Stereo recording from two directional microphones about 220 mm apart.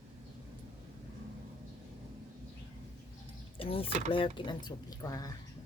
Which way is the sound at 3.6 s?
25° left (ahead or behind).